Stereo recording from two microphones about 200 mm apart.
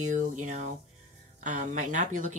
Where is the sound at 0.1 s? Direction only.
40° right (ahead or behind).